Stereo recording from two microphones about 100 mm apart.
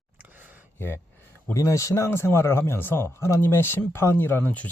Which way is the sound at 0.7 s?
25° left (ahead or behind).